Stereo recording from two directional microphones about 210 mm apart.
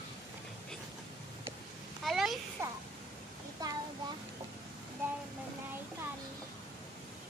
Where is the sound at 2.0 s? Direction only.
Centre (ahead or behind).